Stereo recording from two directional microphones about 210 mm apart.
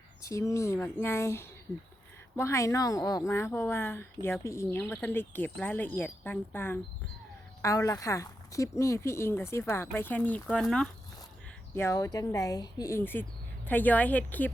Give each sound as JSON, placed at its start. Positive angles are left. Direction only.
{"t": 0.2, "sound": "a woman's voice", "side_deg": 15}